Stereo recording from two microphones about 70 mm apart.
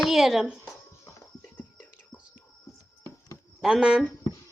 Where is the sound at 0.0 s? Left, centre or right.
Centre.